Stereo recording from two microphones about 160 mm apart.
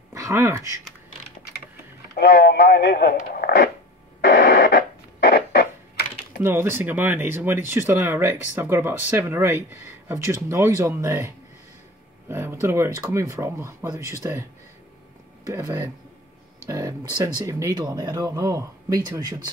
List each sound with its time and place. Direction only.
0.1 s speech: 20° right (ahead or behind)
2.1 s speech: 90° left; by 3.7 s 75° left (ahead or behind)
4.2 s radio: 80° left
6.4 s speech: 15° right (ahead or behind)
15.4 s speech: 20° right (ahead or behind)
16.6 s a sound: 20° right (ahead or behind)
17.2 s speech: 20° right (ahead or behind)